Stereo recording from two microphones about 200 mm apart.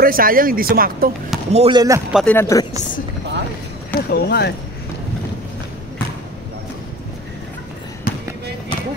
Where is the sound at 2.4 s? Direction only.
15° left (ahead or behind).